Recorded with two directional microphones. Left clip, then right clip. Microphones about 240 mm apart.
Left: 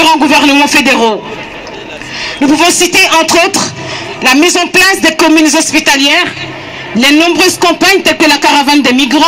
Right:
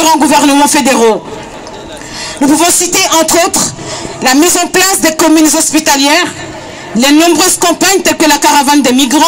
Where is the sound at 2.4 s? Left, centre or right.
Right.